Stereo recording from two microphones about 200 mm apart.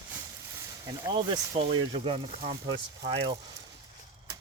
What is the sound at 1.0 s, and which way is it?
Speech, 20° right (ahead or behind).